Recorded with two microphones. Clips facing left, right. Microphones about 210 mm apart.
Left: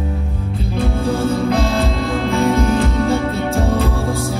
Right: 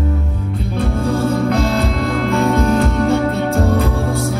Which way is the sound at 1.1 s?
30° left (ahead or behind).